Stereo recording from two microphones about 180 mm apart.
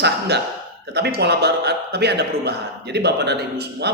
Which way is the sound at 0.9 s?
65° right (ahead or behind).